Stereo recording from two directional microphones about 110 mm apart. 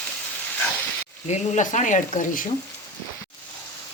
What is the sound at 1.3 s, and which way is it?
Speech, 90° left.